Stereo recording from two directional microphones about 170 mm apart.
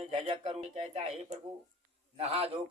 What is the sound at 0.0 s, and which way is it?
A man's voice, 35° right (ahead or behind).